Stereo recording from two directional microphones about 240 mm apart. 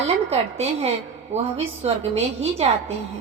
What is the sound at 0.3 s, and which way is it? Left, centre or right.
A woman's voice, right.